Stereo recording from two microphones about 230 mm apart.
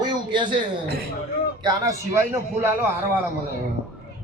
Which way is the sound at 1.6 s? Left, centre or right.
Centre.